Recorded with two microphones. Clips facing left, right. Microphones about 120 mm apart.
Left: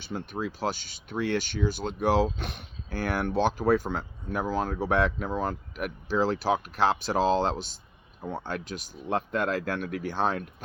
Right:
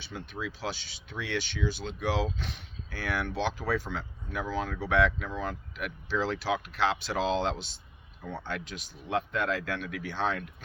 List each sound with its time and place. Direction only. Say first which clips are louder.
0.0 s speech: left 5 dB; 45° left (ahead or behind)